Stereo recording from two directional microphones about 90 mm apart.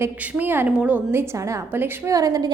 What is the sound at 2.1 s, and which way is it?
Speech, 40° right (ahead or behind).